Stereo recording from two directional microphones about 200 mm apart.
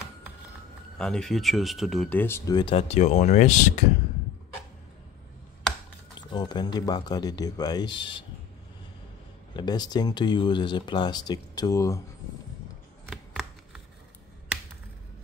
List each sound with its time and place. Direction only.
0.9 s speech: 5° left (ahead or behind)
2.7 s speech: 35° left (ahead or behind)
6.1 s speech: 20° left (ahead or behind)
9.6 s speech: 20° left (ahead or behind)
13.1 s a sound: centre (ahead or behind)